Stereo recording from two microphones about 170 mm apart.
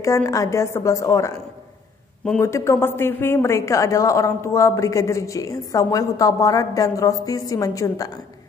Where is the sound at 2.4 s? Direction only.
15° left (ahead or behind).